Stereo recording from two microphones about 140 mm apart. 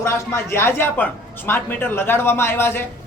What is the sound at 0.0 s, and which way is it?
A man's voice, 20° left (ahead or behind).